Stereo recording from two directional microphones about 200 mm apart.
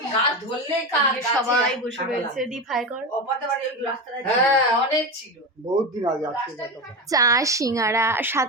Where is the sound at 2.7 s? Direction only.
Centre (ahead or behind).